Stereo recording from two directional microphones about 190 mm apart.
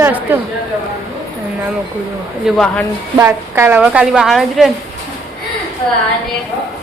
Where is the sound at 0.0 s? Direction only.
10° right (ahead or behind).